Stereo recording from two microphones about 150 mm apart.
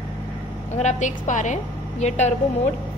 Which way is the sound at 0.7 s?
50° left (ahead or behind).